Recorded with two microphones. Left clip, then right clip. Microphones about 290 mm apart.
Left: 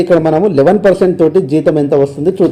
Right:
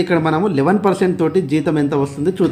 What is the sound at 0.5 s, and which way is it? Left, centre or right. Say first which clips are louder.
Speech: left 7 dB; centre.